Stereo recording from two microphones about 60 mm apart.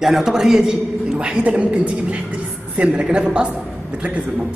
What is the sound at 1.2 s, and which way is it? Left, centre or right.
A woman's voice, centre.